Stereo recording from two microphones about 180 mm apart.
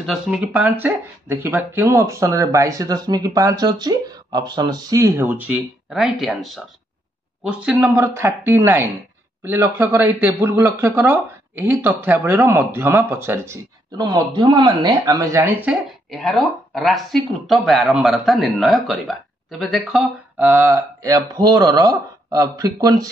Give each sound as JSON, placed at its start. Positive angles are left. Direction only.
{"t": 0.0, "sound": "speech", "side_deg": -5}
{"t": 16.1, "sound": "speech", "side_deg": 0}